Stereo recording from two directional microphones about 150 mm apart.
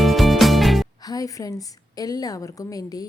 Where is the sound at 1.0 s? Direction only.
25° left (ahead or behind).